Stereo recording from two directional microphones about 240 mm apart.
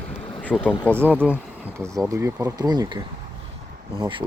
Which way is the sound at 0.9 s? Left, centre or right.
Centre.